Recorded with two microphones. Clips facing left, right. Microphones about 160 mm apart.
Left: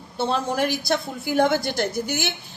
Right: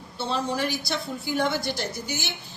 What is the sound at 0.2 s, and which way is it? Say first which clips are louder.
A woman's voice: left 4 dB; 50° left (ahead or behind).